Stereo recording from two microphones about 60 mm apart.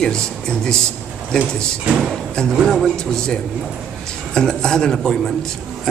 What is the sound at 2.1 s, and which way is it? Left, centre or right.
A man's voice, centre.